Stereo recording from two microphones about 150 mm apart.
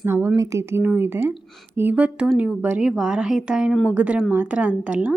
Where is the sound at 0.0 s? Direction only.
15° right (ahead or behind).